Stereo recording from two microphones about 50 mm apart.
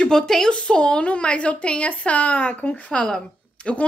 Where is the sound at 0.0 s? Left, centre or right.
Centre.